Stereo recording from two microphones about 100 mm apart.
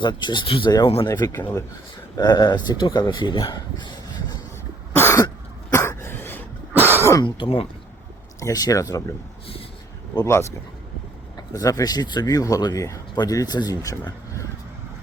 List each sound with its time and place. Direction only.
0.0 s speech: 50° left (ahead or behind)
0.4 s speech: 65° left (ahead or behind)
1.0 s speech: 40° left (ahead or behind)
1.3 s speech: 25° left (ahead or behind)
2.1 s speech: 45° left (ahead or behind)
4.9 s throat clearing: 25° left (ahead or behind)
5.7 s cough: 25° left (ahead or behind)
6.7 s throat clearing: 20° right (ahead or behind)
7.3 s speech: 60° left (ahead or behind)
8.4 s speech: 35° left (ahead or behind)
11.3 s speech: 35° left (ahead or behind)